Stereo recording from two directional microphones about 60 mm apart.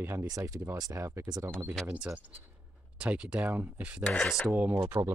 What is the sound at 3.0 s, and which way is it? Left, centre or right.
Speech, right.